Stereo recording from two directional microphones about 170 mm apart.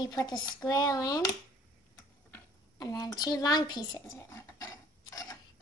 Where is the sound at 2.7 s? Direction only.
25° left (ahead or behind).